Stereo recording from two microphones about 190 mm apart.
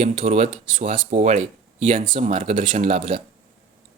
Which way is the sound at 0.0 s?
35° right (ahead or behind).